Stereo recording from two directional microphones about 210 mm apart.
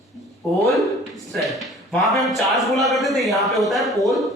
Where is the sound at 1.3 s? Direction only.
Centre (ahead or behind).